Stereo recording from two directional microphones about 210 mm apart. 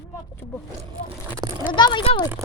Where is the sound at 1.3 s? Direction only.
15° right (ahead or behind).